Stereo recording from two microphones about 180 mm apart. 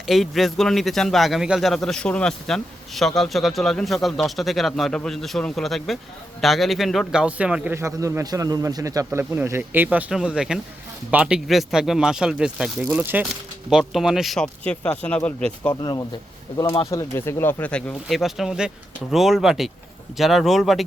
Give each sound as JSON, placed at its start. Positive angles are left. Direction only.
{"t": 0.0, "sound": "a man's voice", "side_deg": 0}
{"t": 15.7, "sound": "a man's voice", "side_deg": 20}